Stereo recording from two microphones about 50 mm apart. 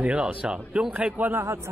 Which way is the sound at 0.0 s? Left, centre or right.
Right.